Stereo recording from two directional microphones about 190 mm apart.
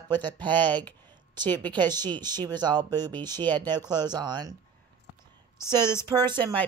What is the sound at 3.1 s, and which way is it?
Speech, 10° left (ahead or behind).